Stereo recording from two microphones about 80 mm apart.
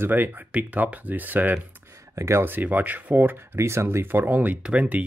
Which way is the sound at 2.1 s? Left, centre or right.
Right.